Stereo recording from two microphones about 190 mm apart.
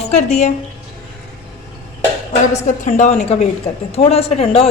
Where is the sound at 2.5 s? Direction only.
40° left (ahead or behind).